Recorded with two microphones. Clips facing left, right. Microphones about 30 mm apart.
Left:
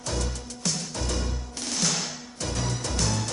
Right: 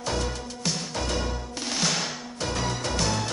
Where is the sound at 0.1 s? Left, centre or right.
Centre.